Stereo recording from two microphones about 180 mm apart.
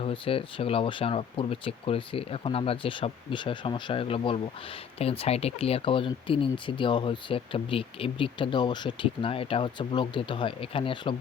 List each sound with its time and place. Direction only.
0.0 s speech: 30° left (ahead or behind)